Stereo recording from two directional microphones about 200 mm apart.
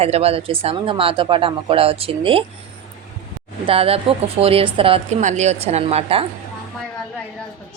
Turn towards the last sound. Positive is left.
turn(degrees=-30)  # may be behind; listen again after turning